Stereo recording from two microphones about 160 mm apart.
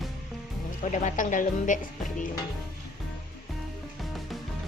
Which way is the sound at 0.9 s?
50° left (ahead or behind).